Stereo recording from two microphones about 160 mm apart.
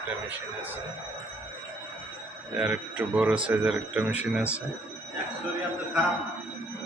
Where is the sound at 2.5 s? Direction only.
5° right (ahead or behind).